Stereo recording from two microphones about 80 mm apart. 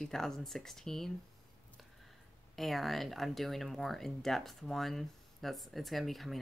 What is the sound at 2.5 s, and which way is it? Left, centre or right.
Speech, centre.